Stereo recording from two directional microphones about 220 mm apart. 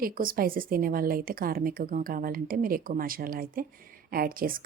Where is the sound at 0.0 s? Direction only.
40° right (ahead or behind).